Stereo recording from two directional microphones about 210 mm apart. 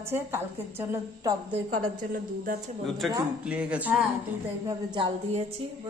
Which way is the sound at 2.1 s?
40° right (ahead or behind).